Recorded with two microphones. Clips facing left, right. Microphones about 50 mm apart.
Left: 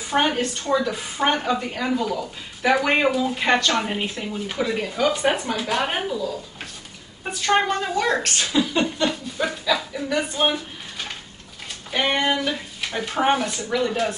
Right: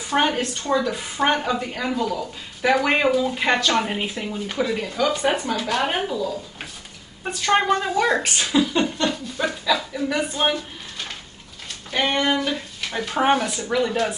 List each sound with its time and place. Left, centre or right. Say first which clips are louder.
0.0 s a woman's voice: even; centre
11.9 s a woman's voice: even; centre